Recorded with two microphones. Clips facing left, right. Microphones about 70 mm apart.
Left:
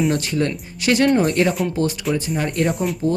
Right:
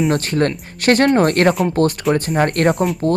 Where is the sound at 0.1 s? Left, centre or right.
Right.